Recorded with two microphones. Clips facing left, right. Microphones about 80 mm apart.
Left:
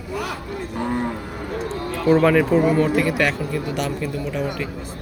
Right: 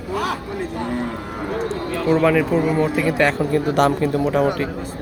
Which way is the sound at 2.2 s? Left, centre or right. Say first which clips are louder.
Left 1 dB; centre.